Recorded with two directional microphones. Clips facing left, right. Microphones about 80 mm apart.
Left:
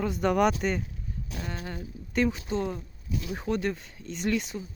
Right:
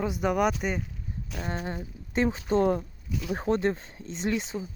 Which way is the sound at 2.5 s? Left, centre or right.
Right.